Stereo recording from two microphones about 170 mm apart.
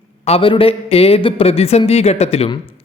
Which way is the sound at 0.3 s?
35° left (ahead or behind).